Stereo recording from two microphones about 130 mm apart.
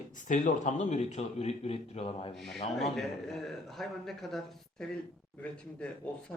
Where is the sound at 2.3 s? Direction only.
Centre (ahead or behind).